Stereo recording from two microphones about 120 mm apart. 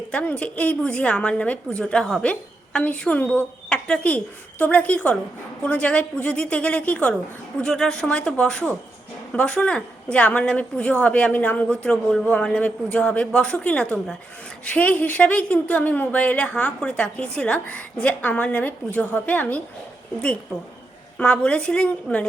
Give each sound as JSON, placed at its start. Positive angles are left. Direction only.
{"t": 0.1, "sound": "a woman's voice", "side_deg": 10}
{"t": 21.2, "sound": "a woman's voice", "side_deg": 10}